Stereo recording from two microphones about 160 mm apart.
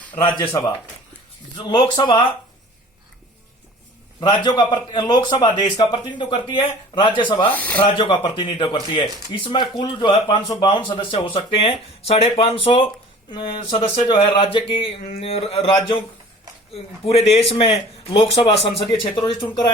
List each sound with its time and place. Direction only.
0.2 s a man's voice: 25° left (ahead or behind)
1.7 s speech: 30° left (ahead or behind)
4.2 s a man's voice: 30° left (ahead or behind)
7.5 s speech: 10° left (ahead or behind)
7.9 s speech: 35° left (ahead or behind)
16.7 s speech: 40° left (ahead or behind)